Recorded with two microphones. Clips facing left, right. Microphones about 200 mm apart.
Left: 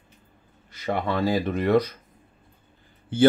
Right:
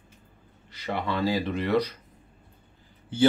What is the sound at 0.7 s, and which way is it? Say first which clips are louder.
Speech: left 4 dB; 45° left (ahead or behind).